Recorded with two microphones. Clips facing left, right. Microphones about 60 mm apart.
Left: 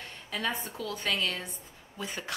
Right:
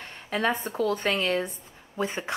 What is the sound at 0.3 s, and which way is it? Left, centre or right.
Speech, right.